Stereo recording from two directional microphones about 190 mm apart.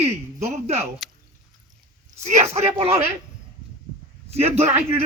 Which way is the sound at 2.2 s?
35° right (ahead or behind).